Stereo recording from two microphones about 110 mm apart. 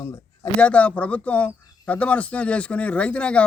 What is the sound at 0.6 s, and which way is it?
Speech, 10° left (ahead or behind).